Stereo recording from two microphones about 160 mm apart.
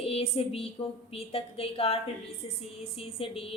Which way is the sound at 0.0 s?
40° left (ahead or behind).